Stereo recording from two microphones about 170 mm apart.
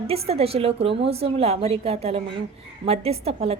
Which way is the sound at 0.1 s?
35° right (ahead or behind).